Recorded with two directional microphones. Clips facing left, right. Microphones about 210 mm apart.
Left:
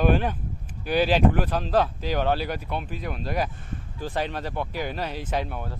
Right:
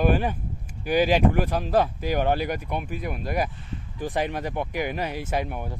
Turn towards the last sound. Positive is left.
turn(degrees=-15)  # may be behind; listen again after turning